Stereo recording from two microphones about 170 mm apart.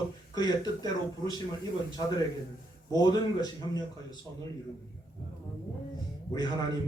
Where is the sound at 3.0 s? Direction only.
20° left (ahead or behind).